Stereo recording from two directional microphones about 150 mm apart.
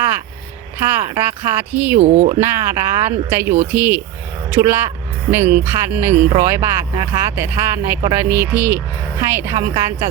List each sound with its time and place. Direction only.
0.9 s speech: 15° right (ahead or behind)
2.0 s speech: 50° right (ahead or behind)
2.4 s speech: 15° right (ahead or behind)